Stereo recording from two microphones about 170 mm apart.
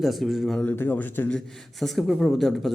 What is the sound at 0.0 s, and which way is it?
Speech, centre (ahead or behind).